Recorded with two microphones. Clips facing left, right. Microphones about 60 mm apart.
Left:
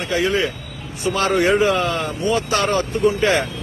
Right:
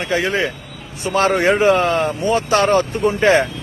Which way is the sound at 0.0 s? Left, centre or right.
Right.